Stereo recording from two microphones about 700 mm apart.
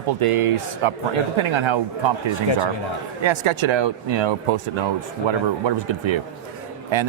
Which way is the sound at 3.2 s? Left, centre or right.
Right.